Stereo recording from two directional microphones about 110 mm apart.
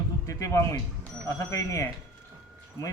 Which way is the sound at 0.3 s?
30° left (ahead or behind).